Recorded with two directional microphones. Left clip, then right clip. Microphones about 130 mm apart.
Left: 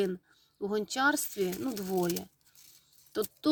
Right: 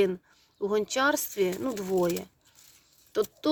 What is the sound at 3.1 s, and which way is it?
Speech, 25° right (ahead or behind).